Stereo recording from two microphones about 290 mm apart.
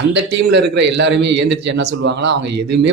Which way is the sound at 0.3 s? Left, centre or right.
Right.